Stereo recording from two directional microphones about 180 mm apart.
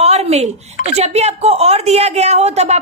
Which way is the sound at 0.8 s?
35° right (ahead or behind).